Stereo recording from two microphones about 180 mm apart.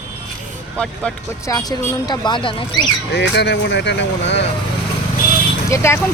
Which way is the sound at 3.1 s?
75° left (ahead or behind).